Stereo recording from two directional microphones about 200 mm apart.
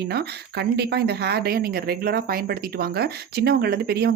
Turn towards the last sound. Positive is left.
turn(degrees=-50)  # may be behind; listen again after turning